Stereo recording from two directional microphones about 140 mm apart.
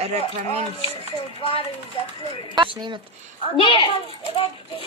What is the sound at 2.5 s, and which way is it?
Speech, 35° right (ahead or behind).